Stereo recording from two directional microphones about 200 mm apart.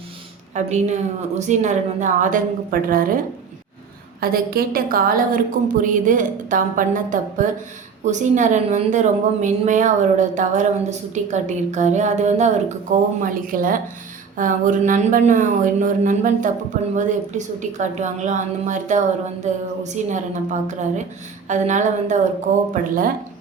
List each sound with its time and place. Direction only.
0.5 s a woman's voice: 35° right (ahead or behind)
4.2 s a woman's voice: 50° right (ahead or behind)